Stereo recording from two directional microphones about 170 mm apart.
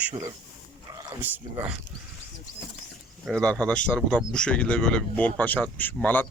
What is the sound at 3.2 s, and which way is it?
Speech, 5° left (ahead or behind).